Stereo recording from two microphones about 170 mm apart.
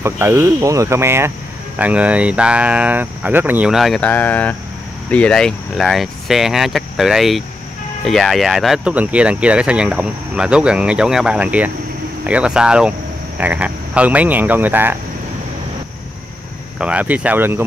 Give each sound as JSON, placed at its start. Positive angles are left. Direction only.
{"t": 0.0, "sound": "speech", "side_deg": -15}
{"t": 16.7, "sound": "speech", "side_deg": -5}